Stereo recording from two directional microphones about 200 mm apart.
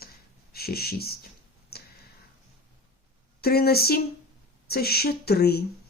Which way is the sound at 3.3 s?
50° left (ahead or behind).